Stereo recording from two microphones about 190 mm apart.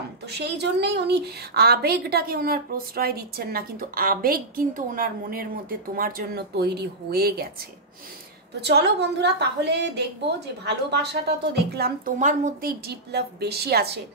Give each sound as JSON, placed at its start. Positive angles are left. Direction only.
{"t": 0.3, "sound": "a woman's voice", "side_deg": -60}
{"t": 8.5, "sound": "a woman's voice", "side_deg": -60}
{"t": 12.2, "sound": "a woman's voice", "side_deg": -40}
{"t": 12.8, "sound": "a woman's voice", "side_deg": -60}